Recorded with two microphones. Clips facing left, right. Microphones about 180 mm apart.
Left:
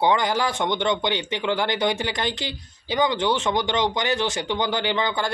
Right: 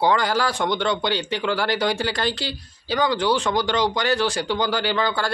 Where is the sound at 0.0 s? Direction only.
20° left (ahead or behind).